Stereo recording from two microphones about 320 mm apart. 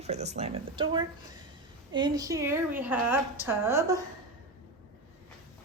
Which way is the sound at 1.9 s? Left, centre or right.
Centre.